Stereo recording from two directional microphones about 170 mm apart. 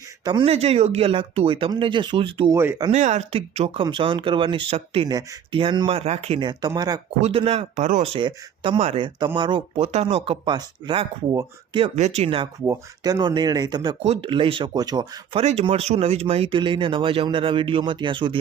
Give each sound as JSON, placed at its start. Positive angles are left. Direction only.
{"t": 0.3, "sound": "speech", "side_deg": -30}
{"t": 2.5, "sound": "speech", "side_deg": -15}
{"t": 2.9, "sound": "speech", "side_deg": -45}
{"t": 7.2, "sound": "speech", "side_deg": -35}
{"t": 11.9, "sound": "speech", "side_deg": -40}
{"t": 12.6, "sound": "speech", "side_deg": -20}
{"t": 14.0, "sound": "speech", "side_deg": -35}
{"t": 15.6, "sound": "speech", "side_deg": -40}